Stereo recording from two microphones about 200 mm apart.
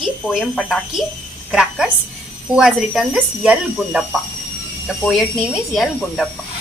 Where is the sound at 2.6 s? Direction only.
5° right (ahead or behind).